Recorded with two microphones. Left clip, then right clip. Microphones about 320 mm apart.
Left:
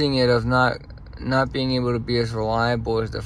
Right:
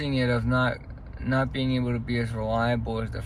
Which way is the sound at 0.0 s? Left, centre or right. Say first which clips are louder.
Left 8 dB; centre.